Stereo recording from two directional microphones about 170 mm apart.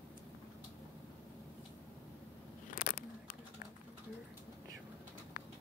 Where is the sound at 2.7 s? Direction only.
55° left (ahead or behind).